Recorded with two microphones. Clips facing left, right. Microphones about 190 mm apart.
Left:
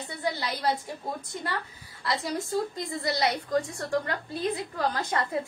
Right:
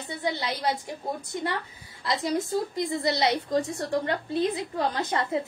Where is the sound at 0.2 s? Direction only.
20° right (ahead or behind).